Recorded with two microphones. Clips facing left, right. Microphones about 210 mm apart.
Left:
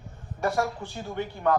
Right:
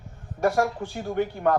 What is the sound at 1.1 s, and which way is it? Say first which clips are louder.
Speech: right 2 dB; 50° right (ahead or behind).